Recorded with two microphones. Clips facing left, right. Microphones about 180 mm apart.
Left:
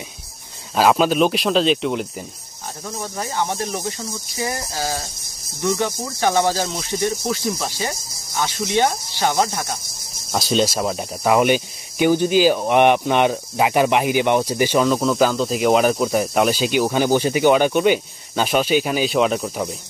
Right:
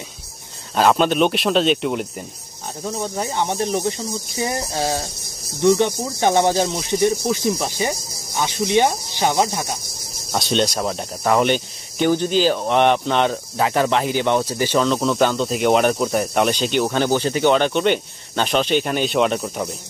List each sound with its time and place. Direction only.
0.7 s speech: 5° left (ahead or behind)
2.8 s speech: 20° right (ahead or behind)
10.3 s speech: centre (ahead or behind)